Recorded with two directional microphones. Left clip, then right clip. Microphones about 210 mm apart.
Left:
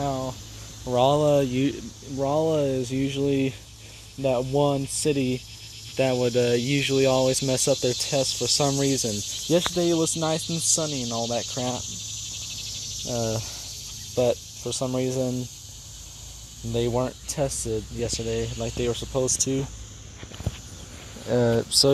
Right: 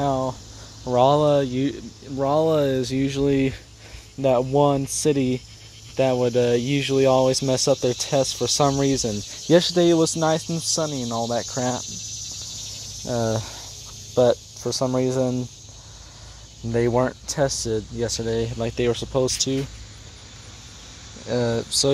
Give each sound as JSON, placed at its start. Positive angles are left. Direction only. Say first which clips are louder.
{"t": 0.0, "sound": "a sound", "louder": "right 5 dB", "side_deg": -25}
{"t": 0.8, "sound": "speech", "louder": "right 3 dB", "side_deg": -15}
{"t": 1.3, "sound": "speech", "louder": "right 1 dB", "side_deg": 5}
{"t": 2.1, "sound": "speech", "louder": "right 4 dB", "side_deg": -10}
{"t": 5.9, "sound": "speech", "louder": "right 3 dB", "side_deg": -5}
{"t": 9.5, "sound": "speech", "louder": "right 6 dB", "side_deg": -30}
{"t": 10.1, "sound": "speech", "louder": "right 4 dB", "side_deg": -15}
{"t": 11.1, "sound": "speech", "louder": "right 2 dB", "side_deg": -25}
{"t": 13.2, "sound": "speech", "louder": "right 3 dB", "side_deg": -30}
{"t": 14.9, "sound": "speech", "louder": "right 4 dB", "side_deg": -20}
{"t": 16.7, "sound": "speech", "louder": "right 5 dB", "side_deg": -15}
{"t": 19.3, "sound": "speech", "louder": "right 2 dB", "side_deg": -5}
{"t": 21.3, "sound": "speech", "louder": "left 1 dB", "side_deg": 10}